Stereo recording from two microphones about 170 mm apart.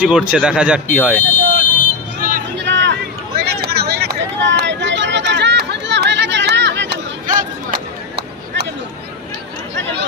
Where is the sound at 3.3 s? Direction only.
70° right (ahead or behind); by 6.9 s 90° right.